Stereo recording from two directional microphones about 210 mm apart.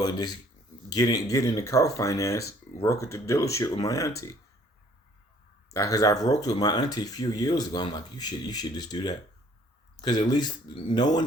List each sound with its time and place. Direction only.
0.0 s speech: 20° left (ahead or behind)
5.7 s speech: 15° left (ahead or behind)